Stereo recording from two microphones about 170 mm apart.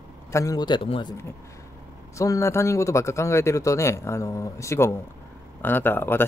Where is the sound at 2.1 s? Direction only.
15° left (ahead or behind).